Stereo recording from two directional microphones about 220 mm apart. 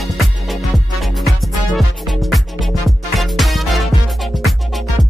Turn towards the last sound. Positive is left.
turn(degrees=0)  # may be behind; listen again after turning